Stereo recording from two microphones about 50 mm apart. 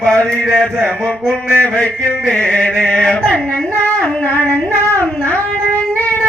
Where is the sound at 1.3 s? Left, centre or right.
Left.